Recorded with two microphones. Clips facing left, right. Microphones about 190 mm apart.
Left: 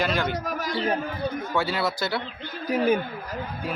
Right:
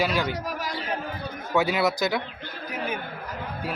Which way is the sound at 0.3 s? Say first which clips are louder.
Left 1 dB; 50° left (ahead or behind).